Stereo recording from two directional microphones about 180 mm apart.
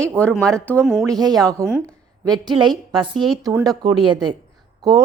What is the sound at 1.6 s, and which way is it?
A woman's voice, 15° right (ahead or behind).